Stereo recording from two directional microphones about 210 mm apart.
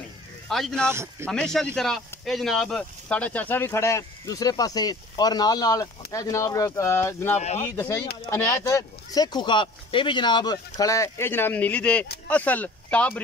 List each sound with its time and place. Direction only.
0.5 s speech: centre (ahead or behind)
7.3 s speech: 30° left (ahead or behind)
7.6 s speech: 15° left (ahead or behind)